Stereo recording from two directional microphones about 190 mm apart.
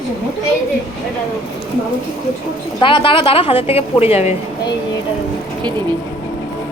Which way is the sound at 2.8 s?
25° left (ahead or behind).